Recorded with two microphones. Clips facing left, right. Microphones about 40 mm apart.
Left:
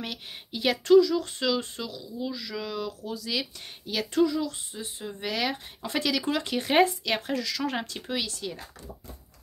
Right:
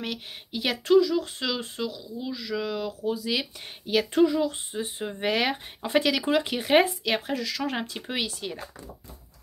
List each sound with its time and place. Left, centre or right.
0.0 s speech: centre
8.1 s speech: right